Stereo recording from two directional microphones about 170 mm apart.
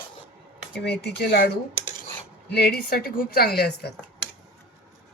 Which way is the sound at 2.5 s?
70° left (ahead or behind).